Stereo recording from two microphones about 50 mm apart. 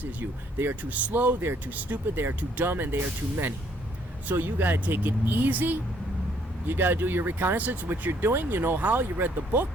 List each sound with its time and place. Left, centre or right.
0.6 s speech: right